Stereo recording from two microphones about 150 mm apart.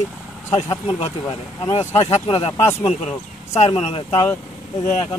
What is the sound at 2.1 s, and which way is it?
Speech, 40° left (ahead or behind).